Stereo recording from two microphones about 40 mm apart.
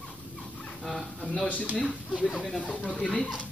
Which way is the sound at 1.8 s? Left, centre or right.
Left.